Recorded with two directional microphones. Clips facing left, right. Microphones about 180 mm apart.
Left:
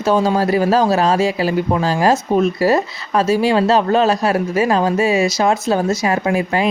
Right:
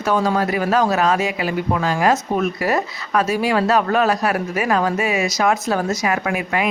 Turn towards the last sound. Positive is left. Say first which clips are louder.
# left 4 dB
turn(degrees=30)  # may be behind; listen again after turning